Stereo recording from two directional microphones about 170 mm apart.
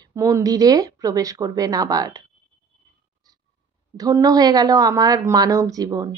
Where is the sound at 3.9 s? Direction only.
20° right (ahead or behind).